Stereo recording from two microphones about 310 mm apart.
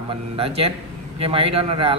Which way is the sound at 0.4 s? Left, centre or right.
Centre.